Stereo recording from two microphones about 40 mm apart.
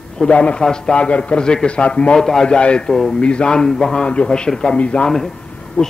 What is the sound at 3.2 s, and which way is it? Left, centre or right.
Speech, left.